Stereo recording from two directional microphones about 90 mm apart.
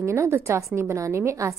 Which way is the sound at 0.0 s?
30° right (ahead or behind).